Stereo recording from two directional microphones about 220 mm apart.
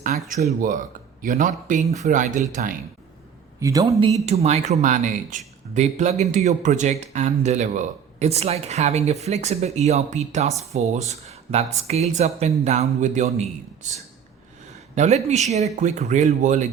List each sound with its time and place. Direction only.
0.1 s speech: 35° right (ahead or behind)
3.6 s speech: 15° right (ahead or behind)
4.3 s speech: 30° right (ahead or behind)
14.9 s speech: 30° right (ahead or behind)